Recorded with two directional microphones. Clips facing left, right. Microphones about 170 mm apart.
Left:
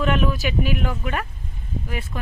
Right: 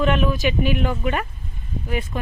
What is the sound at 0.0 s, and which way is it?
Speech, centre (ahead or behind).